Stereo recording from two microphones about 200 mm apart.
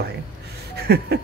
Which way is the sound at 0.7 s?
55° right (ahead or behind).